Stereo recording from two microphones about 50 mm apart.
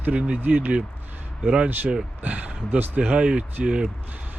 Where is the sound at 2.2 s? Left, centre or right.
Right.